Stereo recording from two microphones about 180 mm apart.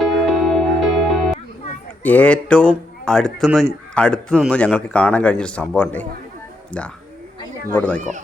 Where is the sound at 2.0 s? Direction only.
10° left (ahead or behind).